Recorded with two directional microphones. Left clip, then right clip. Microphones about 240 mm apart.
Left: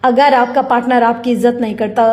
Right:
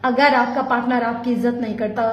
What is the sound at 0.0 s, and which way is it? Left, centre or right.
A woman's voice, left.